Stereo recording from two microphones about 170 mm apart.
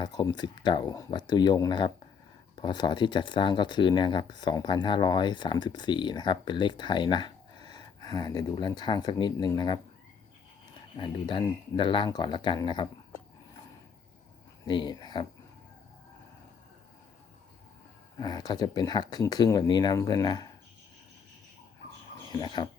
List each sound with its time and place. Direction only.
0.0 s speech: 25° left (ahead or behind)
10.9 s speech: 30° left (ahead or behind)
14.7 s speech: 25° left (ahead or behind)
18.2 s speech: 25° left (ahead or behind)
22.3 s speech: 25° left (ahead or behind)